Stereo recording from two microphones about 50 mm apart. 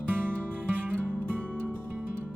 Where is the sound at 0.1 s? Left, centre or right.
Right.